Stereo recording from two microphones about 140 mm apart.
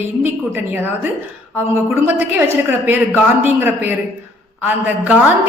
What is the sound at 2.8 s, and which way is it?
A woman's voice, 15° right (ahead or behind).